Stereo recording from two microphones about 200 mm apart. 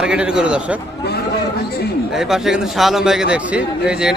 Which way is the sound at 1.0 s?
55° left (ahead or behind).